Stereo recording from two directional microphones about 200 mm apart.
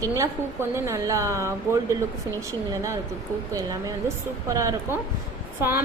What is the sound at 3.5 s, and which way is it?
A woman's voice, 15° right (ahead or behind).